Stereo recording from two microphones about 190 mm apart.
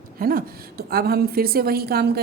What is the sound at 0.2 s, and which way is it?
A woman's voice, 50° right (ahead or behind).